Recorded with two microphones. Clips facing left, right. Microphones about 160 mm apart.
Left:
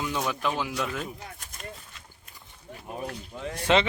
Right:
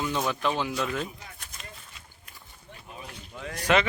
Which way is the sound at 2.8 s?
50° left (ahead or behind).